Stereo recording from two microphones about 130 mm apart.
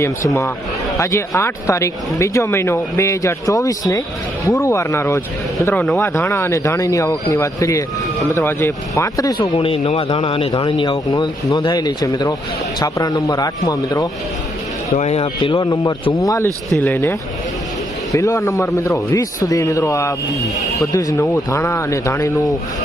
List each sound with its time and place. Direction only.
0.9 s speech: 25° left (ahead or behind)
5.7 s speech: 5° left (ahead or behind)
6.0 s speech: 20° left (ahead or behind)
9.4 s speech: 45° left (ahead or behind); by 14.1 s 30° left (ahead or behind)
14.9 s speech: 55° left (ahead or behind)
15.5 s speech: 30° left (ahead or behind)
16.7 s speech: 15° left (ahead or behind)